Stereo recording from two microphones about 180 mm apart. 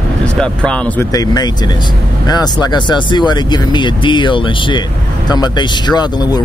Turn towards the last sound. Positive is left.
turn(degrees=20)  # may be behind; listen again after turning